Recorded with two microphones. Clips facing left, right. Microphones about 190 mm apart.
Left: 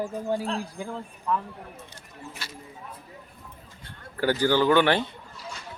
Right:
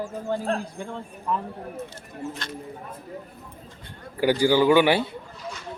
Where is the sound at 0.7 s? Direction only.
5° left (ahead or behind).